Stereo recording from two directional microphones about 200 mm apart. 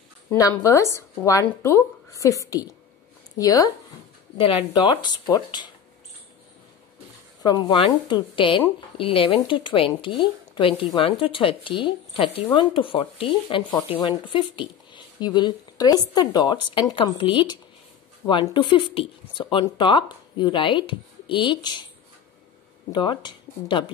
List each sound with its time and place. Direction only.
0.4 s speech: 15° left (ahead or behind)
7.4 s speech: 25° left (ahead or behind)
22.9 s speech: 25° left (ahead or behind)